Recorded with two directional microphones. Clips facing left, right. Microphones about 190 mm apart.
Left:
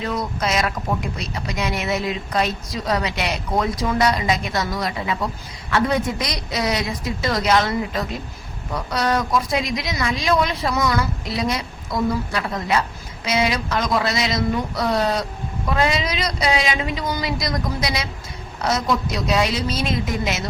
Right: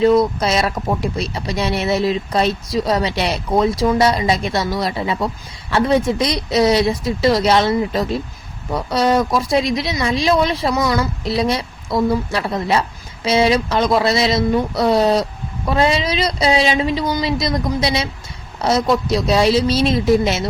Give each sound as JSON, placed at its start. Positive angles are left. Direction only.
{"t": 0.0, "sound": "a woman's voice", "side_deg": -30}